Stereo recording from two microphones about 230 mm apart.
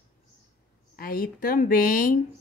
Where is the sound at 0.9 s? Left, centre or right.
Left.